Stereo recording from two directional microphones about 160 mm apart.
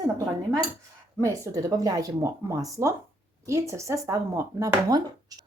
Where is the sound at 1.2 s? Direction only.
20° right (ahead or behind).